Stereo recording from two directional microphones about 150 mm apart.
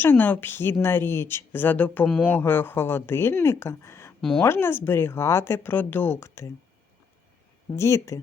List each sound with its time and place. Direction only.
0.0 s a woman's voice: 15° left (ahead or behind)
4.2 s speech: 5° left (ahead or behind)
4.4 s a woman's voice: 15° left (ahead or behind)
7.8 s speech: 20° left (ahead or behind)